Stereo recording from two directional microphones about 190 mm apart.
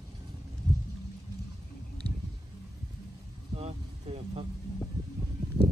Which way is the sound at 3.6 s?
35° right (ahead or behind).